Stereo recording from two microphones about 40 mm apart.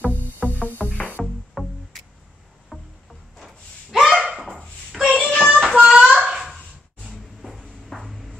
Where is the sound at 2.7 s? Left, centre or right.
Centre.